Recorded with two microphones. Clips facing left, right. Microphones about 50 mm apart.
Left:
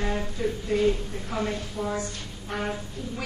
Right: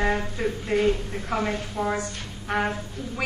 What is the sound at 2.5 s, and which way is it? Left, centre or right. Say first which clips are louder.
Speech: right 6 dB; right.